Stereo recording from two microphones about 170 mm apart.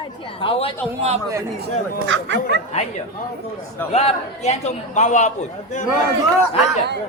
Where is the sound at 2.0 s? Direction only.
90° right.